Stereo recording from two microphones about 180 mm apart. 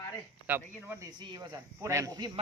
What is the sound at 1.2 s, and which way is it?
Speech, 25° right (ahead or behind).